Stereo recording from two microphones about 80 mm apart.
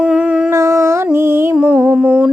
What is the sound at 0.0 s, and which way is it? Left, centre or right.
Dog, centre.